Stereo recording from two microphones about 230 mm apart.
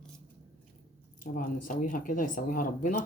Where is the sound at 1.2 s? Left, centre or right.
Left.